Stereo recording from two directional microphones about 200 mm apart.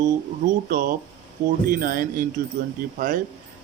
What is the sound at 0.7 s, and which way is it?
A man's voice, 45° right (ahead or behind).